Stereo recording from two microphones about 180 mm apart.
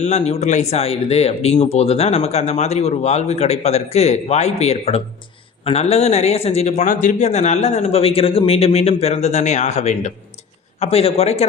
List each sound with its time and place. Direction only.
0.0 s speech: 35° left (ahead or behind)